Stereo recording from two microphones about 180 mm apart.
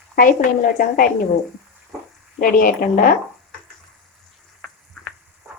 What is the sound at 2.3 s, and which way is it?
Speech, 50° left (ahead or behind).